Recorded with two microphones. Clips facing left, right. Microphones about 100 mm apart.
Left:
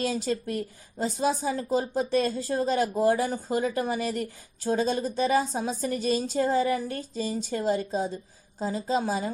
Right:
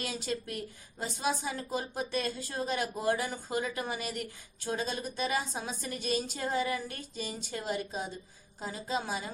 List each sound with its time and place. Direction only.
0.0 s speech: 35° left (ahead or behind)